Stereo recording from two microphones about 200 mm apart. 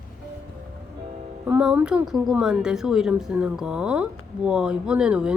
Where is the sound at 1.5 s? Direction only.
5° right (ahead or behind).